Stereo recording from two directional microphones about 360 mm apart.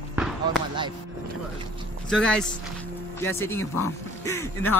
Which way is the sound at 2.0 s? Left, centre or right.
Centre.